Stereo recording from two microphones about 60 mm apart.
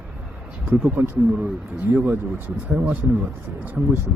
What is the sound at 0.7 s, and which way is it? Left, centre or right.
Speech, right.